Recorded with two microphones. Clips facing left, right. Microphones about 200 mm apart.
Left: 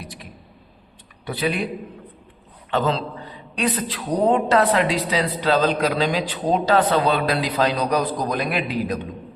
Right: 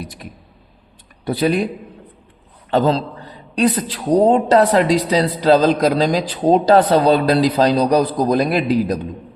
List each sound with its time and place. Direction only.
1.2 s a woman's voice: 40° right (ahead or behind)